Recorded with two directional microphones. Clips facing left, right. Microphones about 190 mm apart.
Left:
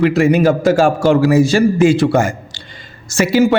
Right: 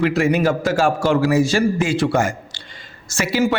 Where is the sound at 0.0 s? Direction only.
25° left (ahead or behind).